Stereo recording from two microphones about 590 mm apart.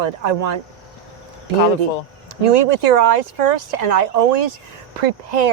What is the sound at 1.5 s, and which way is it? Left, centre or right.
Speech, right.